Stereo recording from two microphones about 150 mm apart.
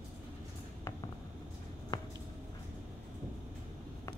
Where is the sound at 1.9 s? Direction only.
25° left (ahead or behind).